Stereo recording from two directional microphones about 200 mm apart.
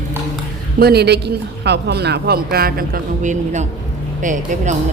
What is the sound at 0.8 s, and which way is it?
A woman's voice, 55° right (ahead or behind).